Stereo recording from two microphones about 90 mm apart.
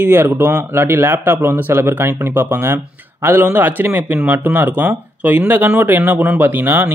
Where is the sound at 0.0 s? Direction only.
25° right (ahead or behind).